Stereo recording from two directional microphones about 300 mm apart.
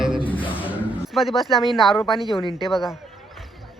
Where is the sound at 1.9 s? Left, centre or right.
Centre.